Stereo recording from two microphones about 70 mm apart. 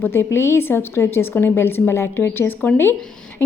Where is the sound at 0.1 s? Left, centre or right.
Left.